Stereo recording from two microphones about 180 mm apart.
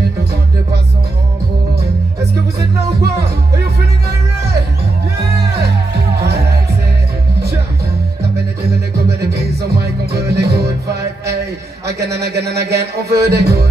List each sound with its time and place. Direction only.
3.0 s music: 65° right (ahead or behind)
5.6 s music: 65° right (ahead or behind)
9.2 s music: 65° right (ahead or behind)